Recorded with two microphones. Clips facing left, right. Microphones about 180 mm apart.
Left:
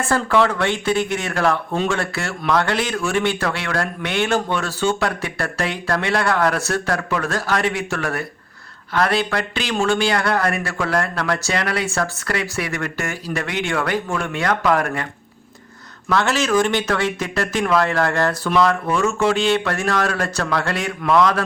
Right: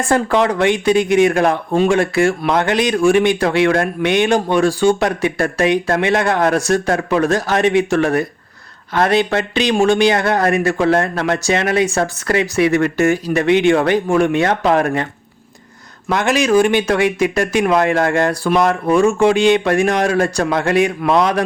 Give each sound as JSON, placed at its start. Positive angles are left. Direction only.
{"t": 0.1, "sound": "speech", "side_deg": -20}
{"t": 16.0, "sound": "speech", "side_deg": -15}